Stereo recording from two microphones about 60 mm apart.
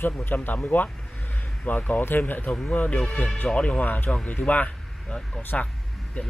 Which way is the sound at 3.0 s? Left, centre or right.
Centre.